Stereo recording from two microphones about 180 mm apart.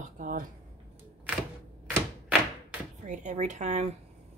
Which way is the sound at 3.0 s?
45° right (ahead or behind).